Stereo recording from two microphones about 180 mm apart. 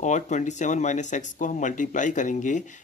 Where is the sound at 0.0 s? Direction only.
40° left (ahead or behind).